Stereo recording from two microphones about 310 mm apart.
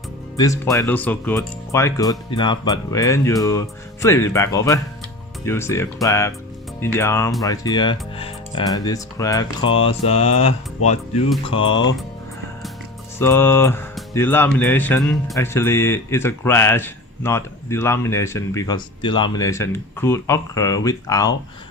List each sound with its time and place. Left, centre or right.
0.3 s speech: centre
9.7 s mantra: centre
11.6 s speech: left
13.1 s speech: centre